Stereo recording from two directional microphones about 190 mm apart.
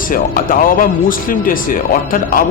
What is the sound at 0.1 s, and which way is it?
Speech, 45° left (ahead or behind).